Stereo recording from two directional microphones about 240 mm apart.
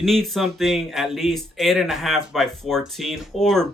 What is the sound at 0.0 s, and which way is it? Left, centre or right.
Speech, centre.